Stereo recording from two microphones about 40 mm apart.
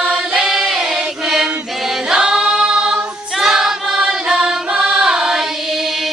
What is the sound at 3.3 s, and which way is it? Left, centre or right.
Choir, centre.